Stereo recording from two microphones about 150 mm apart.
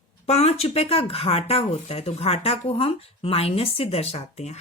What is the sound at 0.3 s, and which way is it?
Speech, 45° left (ahead or behind).